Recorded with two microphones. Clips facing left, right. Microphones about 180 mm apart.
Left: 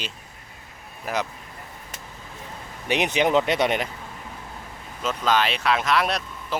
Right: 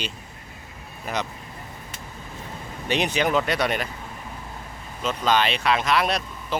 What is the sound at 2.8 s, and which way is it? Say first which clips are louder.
Speech: left 1 dB; 15° left (ahead or behind).